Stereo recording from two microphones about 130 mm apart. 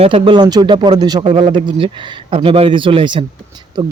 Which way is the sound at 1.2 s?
45° right (ahead or behind).